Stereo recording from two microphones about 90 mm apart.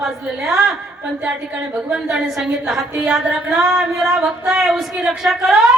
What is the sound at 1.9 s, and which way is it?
A woman's voice, 5° right (ahead or behind).